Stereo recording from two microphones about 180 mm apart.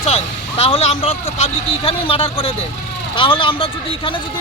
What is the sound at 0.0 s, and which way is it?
Speech, 35° left (ahead or behind).